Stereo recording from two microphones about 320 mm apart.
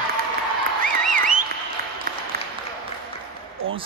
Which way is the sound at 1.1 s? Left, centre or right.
Right.